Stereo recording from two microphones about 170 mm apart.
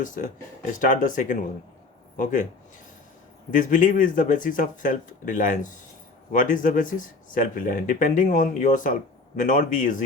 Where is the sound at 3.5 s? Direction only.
50° left (ahead or behind).